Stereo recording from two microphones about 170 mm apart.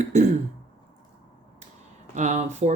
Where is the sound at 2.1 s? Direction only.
45° right (ahead or behind).